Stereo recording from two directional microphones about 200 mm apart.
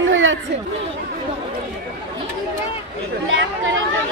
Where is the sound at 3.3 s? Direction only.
75° right (ahead or behind).